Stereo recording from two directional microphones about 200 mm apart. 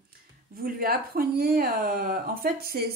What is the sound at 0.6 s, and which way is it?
Speech, 45° right (ahead or behind).